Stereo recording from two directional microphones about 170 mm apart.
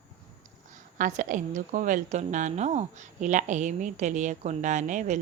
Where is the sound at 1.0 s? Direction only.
50° right (ahead or behind).